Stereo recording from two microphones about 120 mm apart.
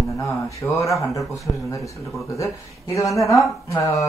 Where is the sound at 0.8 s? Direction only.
25° left (ahead or behind).